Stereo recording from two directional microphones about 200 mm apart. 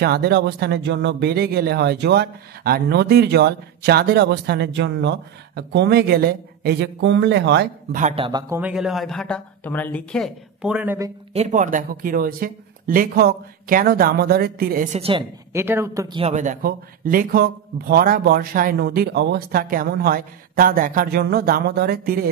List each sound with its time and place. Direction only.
0.0 s speech: 50° right (ahead or behind)
7.9 s speech: 40° right (ahead or behind)
8.2 s speech: 20° right (ahead or behind)
8.5 s speech: 5° right (ahead or behind)
11.3 s speech: 40° right (ahead or behind)
15.0 s speech: 30° right (ahead or behind)
15.5 s speech: 10° right (ahead or behind)
16.2 s speech: 35° right (ahead or behind)